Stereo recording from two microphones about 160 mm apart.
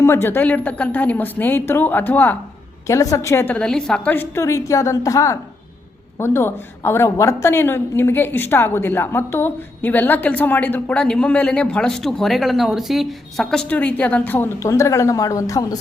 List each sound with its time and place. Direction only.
0.0 s a woman's voice: 15° left (ahead or behind)